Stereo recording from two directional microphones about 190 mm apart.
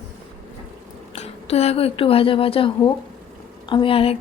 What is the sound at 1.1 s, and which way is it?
A woman's voice, 35° left (ahead or behind).